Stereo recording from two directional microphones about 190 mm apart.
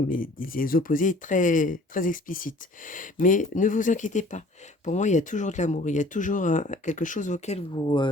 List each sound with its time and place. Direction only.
0.1 s speech: 45° left (ahead or behind); by 8.1 s 25° left (ahead or behind)